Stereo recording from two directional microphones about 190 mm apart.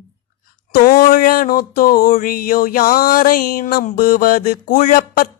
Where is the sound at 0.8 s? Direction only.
50° left (ahead or behind).